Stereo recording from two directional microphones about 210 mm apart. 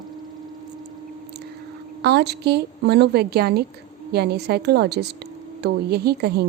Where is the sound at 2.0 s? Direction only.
50° right (ahead or behind).